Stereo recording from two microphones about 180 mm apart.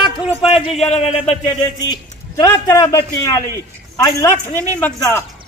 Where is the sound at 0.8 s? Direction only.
35° left (ahead or behind).